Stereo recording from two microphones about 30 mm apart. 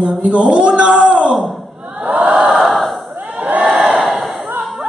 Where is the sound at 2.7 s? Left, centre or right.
Centre.